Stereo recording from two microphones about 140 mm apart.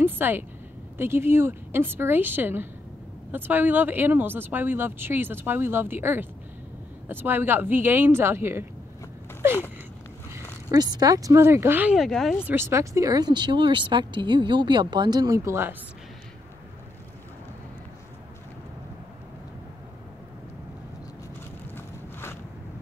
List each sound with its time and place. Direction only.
0.0 s a sound: 15° right (ahead or behind)
0.9 s speech: 15° right (ahead or behind)
10.7 s speech: 30° right (ahead or behind); by 12.0 s 15° right (ahead or behind)
12.0 s speech: centre (ahead or behind)
12.4 s speech: 15° right (ahead or behind)
21.7 s walk: 15° left (ahead or behind)